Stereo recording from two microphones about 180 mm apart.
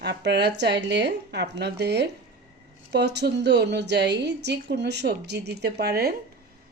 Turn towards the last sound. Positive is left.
turn(degrees=-60)  # may be behind; listen again after turning